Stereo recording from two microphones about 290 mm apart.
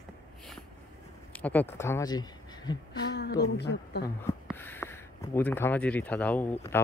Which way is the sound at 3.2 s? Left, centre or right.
Left.